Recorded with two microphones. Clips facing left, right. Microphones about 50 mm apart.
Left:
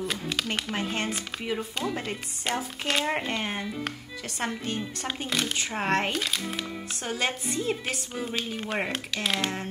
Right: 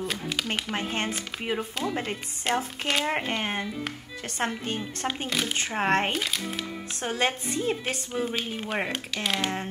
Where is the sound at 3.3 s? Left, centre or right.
Centre.